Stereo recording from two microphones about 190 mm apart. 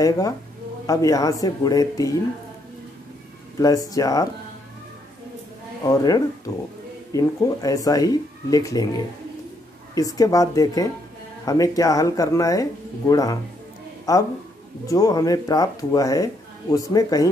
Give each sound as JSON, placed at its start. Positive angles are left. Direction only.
{"t": 0.0, "sound": "speech", "side_deg": 20}
{"t": 3.5, "sound": "speech", "side_deg": 20}
{"t": 5.9, "sound": "speech", "side_deg": 20}